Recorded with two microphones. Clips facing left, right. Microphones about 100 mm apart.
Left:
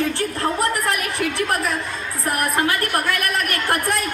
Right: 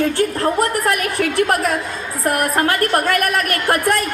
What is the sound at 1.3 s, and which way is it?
Speech, 45° right (ahead or behind).